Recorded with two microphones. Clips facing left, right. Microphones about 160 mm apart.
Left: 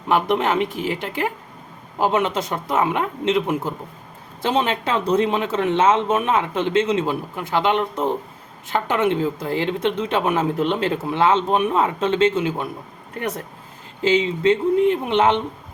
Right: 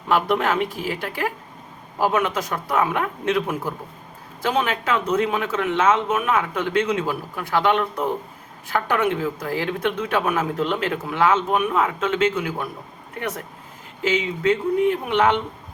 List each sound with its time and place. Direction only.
0.1 s a woman's voice: 20° left (ahead or behind)